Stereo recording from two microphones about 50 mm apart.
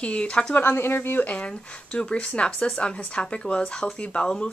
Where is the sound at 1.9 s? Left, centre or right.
Left.